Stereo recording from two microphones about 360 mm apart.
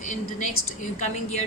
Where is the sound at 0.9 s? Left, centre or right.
Centre.